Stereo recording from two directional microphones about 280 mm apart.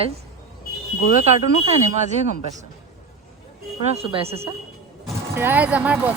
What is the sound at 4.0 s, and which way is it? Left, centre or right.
Speech, right.